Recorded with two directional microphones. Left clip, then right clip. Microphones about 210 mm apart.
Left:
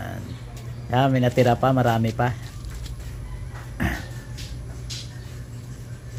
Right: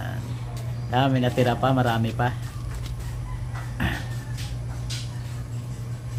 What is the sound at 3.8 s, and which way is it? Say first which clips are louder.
Music: left 1 dB; 20° left (ahead or behind).